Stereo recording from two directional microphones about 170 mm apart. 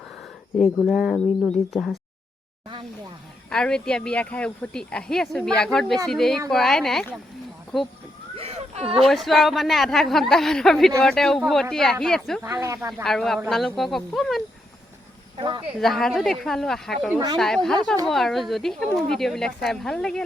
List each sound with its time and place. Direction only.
0.9 s speech: centre (ahead or behind)
3.5 s speech: 5° left (ahead or behind)
8.4 s a sound: 40° right (ahead or behind)
9.0 s speech: centre (ahead or behind)
12.4 s speech: 20° right (ahead or behind)
12.9 s speech: centre (ahead or behind)
15.4 s speech: 25° right (ahead or behind)
15.8 s speech: centre (ahead or behind)